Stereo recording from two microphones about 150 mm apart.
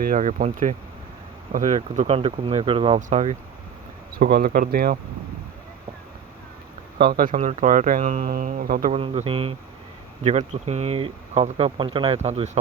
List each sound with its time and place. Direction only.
0.0 s speech: 60° right (ahead or behind); by 3.0 s 35° right (ahead or behind)
3.1 s speech: 50° right (ahead or behind)
4.2 s speech: 75° right (ahead or behind)
7.0 s speech: 70° right (ahead or behind)
8.9 s speech: 45° right (ahead or behind)